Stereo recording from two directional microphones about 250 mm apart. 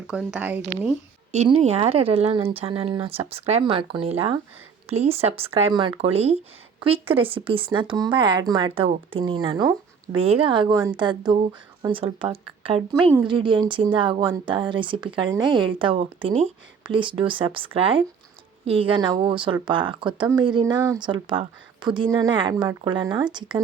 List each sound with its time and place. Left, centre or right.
0.1 s speech: centre
1.3 s a woman's voice: right